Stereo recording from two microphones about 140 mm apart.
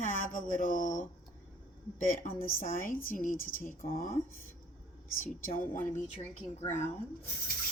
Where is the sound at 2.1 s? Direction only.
80° left.